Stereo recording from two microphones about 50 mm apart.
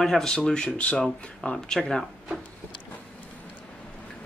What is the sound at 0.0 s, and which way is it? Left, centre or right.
Speech, centre.